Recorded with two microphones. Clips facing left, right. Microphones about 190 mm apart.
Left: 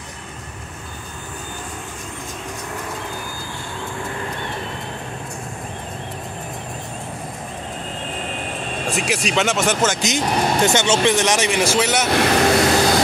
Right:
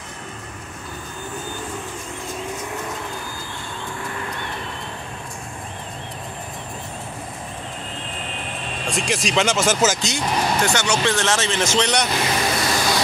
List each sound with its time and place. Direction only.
8.8 s speech: 5° left (ahead or behind)
10.0 s speech: 20° left (ahead or behind)
12.1 s speech: 65° left (ahead or behind)